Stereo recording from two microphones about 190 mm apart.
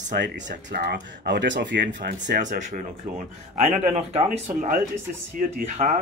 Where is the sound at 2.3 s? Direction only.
40° right (ahead or behind).